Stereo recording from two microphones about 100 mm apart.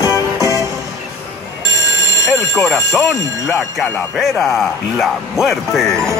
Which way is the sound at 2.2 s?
30° left (ahead or behind).